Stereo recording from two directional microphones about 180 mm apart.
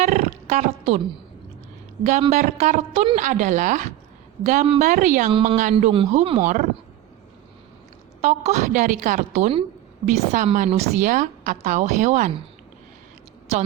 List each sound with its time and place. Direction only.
0.0 s roaring cats: 40° right (ahead or behind)
2.3 s a woman's voice: 40° right (ahead or behind)
5.3 s a woman's voice: 30° right (ahead or behind)
8.2 s a woman's voice: 40° right (ahead or behind)